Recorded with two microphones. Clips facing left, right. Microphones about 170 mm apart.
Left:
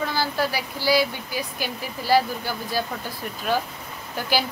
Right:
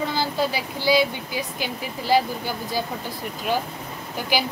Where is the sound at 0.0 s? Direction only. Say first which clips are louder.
Right 1 dB; 20° right (ahead or behind).